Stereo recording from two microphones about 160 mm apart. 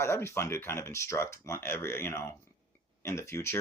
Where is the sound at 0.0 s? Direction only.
15° left (ahead or behind).